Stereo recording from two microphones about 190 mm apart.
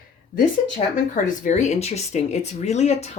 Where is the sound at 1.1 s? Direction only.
40° left (ahead or behind).